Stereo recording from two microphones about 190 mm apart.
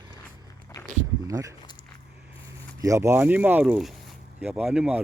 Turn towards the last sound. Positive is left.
turn(degrees=-5)  # may be behind; listen again after turning